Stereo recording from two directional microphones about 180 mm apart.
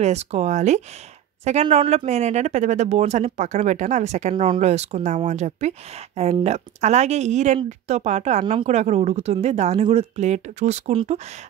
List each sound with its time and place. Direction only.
0.0 s speech: 35° right (ahead or behind)